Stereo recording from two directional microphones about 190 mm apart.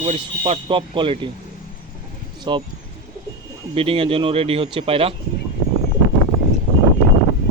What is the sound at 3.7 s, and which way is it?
Speech, 30° right (ahead or behind).